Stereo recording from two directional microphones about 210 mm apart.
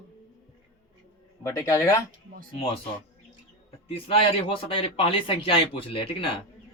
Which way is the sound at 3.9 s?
25° left (ahead or behind).